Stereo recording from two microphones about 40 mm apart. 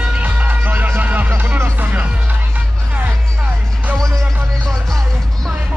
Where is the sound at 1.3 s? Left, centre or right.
Right.